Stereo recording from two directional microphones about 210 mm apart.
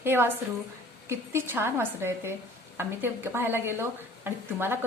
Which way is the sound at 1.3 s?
10° right (ahead or behind).